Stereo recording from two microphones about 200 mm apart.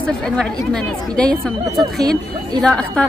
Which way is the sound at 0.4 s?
5° left (ahead or behind).